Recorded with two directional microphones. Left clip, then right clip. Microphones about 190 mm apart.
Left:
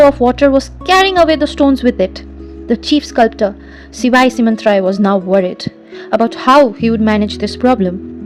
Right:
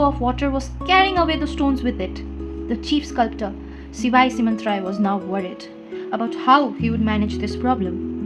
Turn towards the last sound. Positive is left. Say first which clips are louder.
# left 9 dB
turn(degrees=50)  # may be behind; listen again after turning